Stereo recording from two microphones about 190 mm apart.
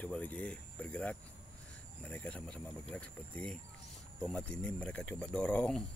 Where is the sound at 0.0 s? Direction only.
10° left (ahead or behind).